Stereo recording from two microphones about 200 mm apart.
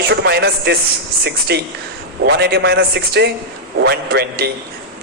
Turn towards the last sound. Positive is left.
turn(degrees=-55)  # may be behind; listen again after turning